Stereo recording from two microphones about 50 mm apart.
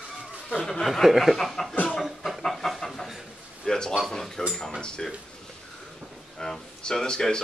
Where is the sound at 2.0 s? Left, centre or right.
Centre.